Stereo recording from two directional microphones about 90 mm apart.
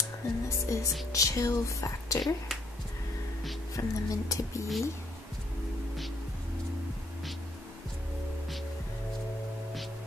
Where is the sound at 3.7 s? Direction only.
40° left (ahead or behind).